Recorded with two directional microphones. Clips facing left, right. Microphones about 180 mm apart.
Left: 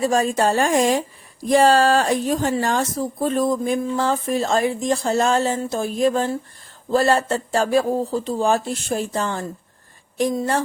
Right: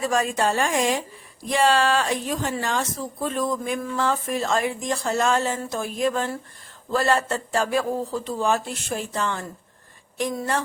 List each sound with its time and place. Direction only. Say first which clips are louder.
0.0 s a woman's voice: left 4 dB; 30° left (ahead or behind)